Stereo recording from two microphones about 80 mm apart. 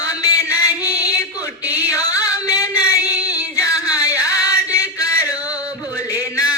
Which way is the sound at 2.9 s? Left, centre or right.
Left.